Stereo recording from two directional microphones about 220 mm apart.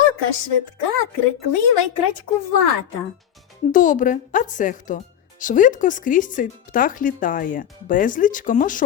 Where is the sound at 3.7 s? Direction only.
35° left (ahead or behind).